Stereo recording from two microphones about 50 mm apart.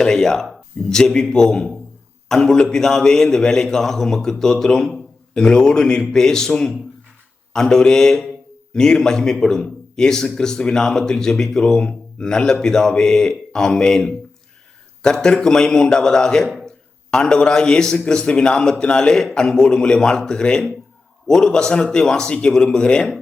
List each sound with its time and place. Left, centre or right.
0.0 s speech: centre